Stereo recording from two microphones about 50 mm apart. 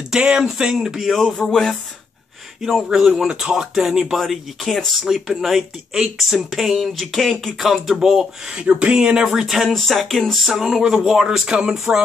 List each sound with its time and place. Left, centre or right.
0.1 s speech: centre
1.1 s a sound: centre
2.9 s speech: centre